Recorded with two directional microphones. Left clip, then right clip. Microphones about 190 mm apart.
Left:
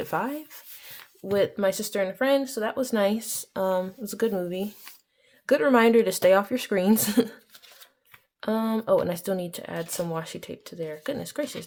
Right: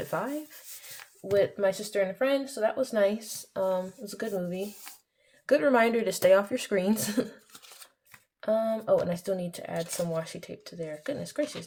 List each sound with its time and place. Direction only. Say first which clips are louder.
0.0 s speech: left 3 dB; 40° left (ahead or behind)
8.4 s speech: right 1 dB; 45° left (ahead or behind)